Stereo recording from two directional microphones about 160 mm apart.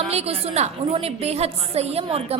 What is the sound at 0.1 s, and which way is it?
A woman's voice, 40° right (ahead or behind).